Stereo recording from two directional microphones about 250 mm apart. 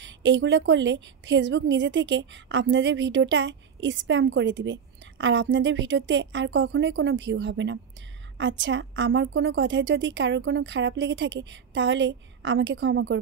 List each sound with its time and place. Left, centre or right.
0.0 s a woman's voice: right